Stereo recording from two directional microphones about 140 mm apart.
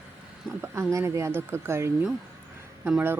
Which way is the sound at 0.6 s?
20° right (ahead or behind).